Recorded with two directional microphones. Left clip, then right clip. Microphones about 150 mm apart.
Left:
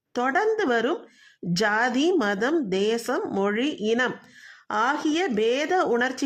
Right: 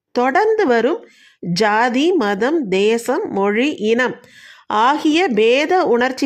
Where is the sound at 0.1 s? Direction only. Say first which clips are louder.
Right 8 dB; 25° right (ahead or behind).